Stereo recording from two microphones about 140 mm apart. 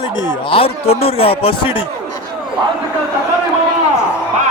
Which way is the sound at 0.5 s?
45° left (ahead or behind).